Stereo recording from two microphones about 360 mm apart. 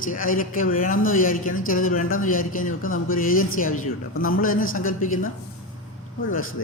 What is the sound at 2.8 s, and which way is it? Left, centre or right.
Speech, left.